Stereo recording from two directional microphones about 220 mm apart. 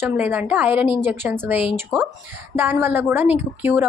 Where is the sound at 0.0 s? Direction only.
5° right (ahead or behind).